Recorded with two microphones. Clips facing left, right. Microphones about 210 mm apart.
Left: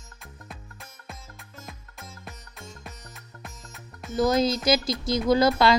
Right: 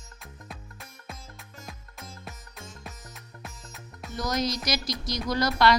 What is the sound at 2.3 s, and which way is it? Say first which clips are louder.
Music: left 1 dB; centre (ahead or behind).